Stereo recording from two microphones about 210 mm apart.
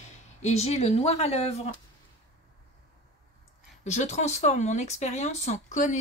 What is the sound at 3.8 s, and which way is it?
Speech, 35° left (ahead or behind).